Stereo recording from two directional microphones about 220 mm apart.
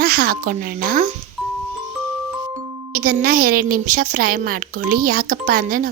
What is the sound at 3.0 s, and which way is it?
A woman's voice, 40° right (ahead or behind).